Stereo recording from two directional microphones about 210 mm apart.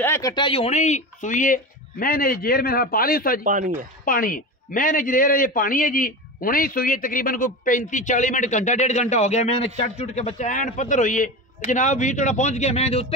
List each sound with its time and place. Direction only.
0.0 s a man's voice: 15° left (ahead or behind); by 3.3 s 45° left (ahead or behind)
3.4 s speech: 40° right (ahead or behind)
4.0 s a man's voice: 40° left (ahead or behind)